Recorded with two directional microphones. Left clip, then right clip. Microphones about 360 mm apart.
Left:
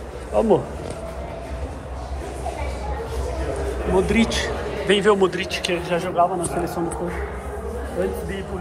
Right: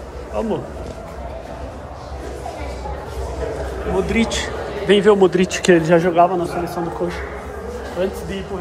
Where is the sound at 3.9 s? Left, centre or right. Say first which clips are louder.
Even; centre.